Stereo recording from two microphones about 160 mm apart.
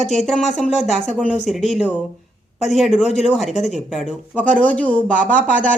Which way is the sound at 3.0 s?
45° left (ahead or behind).